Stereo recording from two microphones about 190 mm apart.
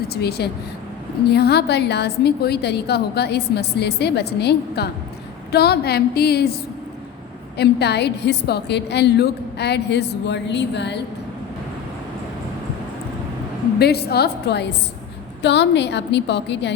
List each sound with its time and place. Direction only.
0.1 s a woman's voice: 60° left (ahead or behind)
13.7 s a woman's voice: 60° left (ahead or behind)